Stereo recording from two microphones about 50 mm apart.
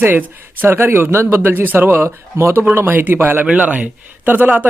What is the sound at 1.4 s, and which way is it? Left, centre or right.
Speech, right.